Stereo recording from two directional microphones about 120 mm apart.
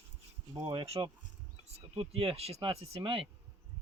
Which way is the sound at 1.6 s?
55° right (ahead or behind).